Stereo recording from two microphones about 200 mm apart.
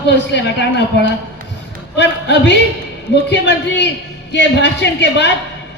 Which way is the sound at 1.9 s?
60° left (ahead or behind).